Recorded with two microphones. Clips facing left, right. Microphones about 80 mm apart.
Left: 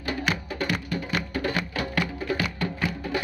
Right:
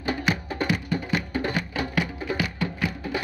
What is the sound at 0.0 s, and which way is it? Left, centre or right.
Music, right.